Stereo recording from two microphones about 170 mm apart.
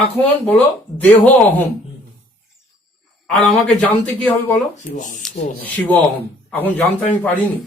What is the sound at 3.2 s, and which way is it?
Speech, centre (ahead or behind).